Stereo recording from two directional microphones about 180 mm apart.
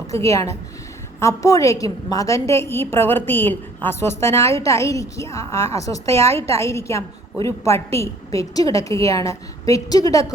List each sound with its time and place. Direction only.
0.1 s a woman's voice: 15° left (ahead or behind)